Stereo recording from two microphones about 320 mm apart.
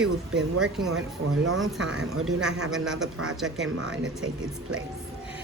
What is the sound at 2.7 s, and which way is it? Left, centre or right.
A woman's voice, centre.